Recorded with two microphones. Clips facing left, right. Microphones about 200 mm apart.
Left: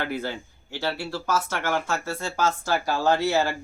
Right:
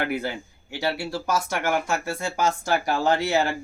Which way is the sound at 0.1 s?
15° right (ahead or behind).